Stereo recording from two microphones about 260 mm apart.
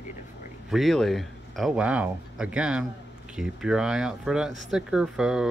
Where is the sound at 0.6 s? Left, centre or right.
Centre.